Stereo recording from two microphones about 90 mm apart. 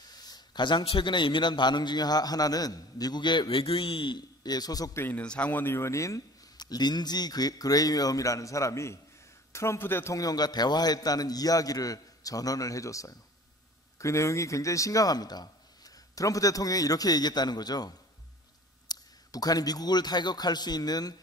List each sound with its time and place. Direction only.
0.2 s a man's voice: 50° left (ahead or behind)
4.9 s speech: 25° left (ahead or behind)
6.5 s a man's voice: 50° left (ahead or behind); by 10.1 s 25° left (ahead or behind)
10.1 s speech: 45° left (ahead or behind)